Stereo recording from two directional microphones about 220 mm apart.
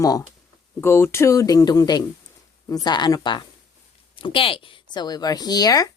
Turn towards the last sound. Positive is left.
turn(degrees=15)  # may be behind; listen again after turning